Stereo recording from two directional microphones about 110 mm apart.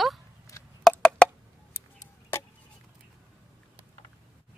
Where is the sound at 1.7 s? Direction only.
25° left (ahead or behind).